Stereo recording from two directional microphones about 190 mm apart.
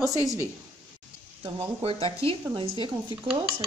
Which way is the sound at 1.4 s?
30° right (ahead or behind).